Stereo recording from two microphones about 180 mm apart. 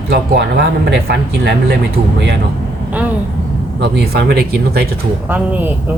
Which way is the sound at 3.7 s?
70° right (ahead or behind).